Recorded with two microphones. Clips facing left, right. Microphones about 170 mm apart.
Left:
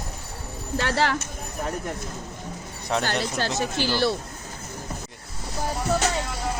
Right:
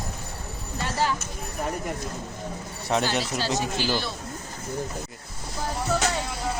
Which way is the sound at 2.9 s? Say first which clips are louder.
Right 1 dB; 5° right (ahead or behind).